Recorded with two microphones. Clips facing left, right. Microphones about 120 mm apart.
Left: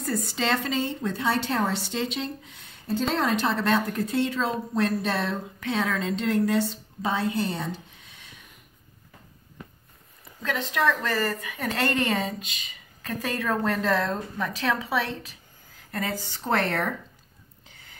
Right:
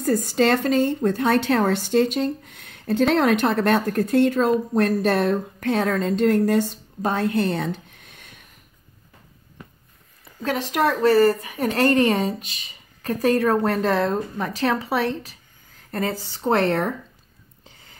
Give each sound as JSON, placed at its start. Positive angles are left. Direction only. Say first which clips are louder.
{"t": 0.0, "sound": "a woman's voice", "louder": "right 8 dB", "side_deg": -45}
{"t": 10.4, "sound": "a woman's voice", "louder": "right 4 dB", "side_deg": -40}
{"t": 14.1, "sound": "a woman's voice", "louder": "right 5 dB", "side_deg": -45}
{"t": 15.9, "sound": "speech", "louder": "right 5 dB", "side_deg": -30}